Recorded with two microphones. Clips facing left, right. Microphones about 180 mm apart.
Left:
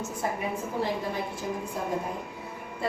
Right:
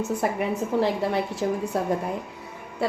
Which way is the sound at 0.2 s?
75° right (ahead or behind).